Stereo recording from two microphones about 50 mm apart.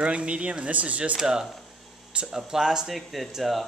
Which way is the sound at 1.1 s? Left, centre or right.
Centre.